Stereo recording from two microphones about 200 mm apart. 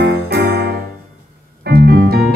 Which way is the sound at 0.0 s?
50° right (ahead or behind).